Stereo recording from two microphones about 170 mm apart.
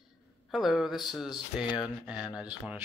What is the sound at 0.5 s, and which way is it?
Speech, centre (ahead or behind).